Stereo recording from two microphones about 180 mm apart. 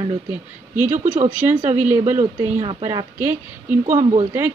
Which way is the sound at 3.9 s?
30° right (ahead or behind).